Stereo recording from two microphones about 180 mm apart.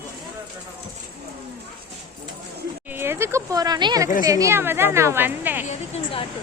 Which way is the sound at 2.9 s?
15° right (ahead or behind).